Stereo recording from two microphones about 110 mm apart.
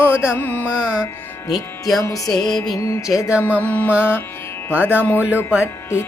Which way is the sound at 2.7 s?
30° left (ahead or behind).